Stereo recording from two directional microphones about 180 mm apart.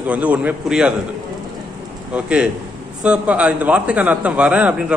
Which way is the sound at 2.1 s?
5° right (ahead or behind).